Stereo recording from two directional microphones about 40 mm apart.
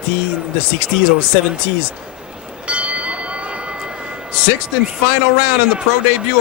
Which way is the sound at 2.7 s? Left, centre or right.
Right.